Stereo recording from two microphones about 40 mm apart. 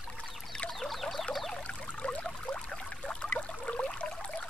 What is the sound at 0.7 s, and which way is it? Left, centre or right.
Frog, centre.